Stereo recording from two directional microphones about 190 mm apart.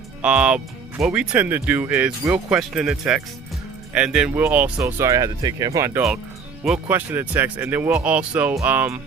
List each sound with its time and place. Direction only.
0.2 s speech: 5° right (ahead or behind)